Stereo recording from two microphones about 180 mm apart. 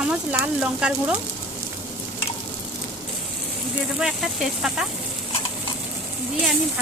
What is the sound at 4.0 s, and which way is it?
Speech, centre (ahead or behind).